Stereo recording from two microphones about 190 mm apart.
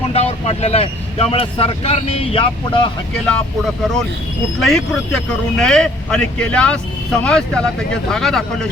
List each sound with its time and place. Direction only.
0.1 s speech: 35° left (ahead or behind)
4.6 s speech: centre (ahead or behind)